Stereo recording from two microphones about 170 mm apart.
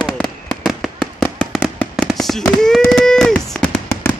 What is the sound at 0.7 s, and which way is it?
Fireworks, centre (ahead or behind).